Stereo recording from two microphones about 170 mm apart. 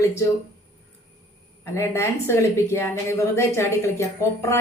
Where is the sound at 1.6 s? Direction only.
15° left (ahead or behind).